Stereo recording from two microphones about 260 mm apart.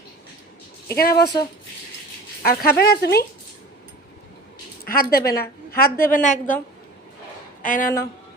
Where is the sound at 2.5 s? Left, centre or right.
Left.